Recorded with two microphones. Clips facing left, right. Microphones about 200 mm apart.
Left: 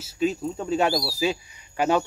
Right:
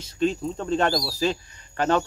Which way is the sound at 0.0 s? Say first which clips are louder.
Right 1 dB; 5° left (ahead or behind).